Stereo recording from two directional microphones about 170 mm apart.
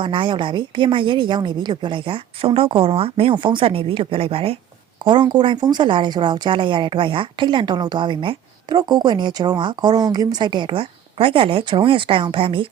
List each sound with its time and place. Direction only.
0.0 s a woman's voice: 30° right (ahead or behind)